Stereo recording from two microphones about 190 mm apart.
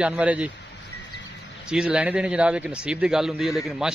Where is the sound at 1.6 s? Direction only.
5° right (ahead or behind).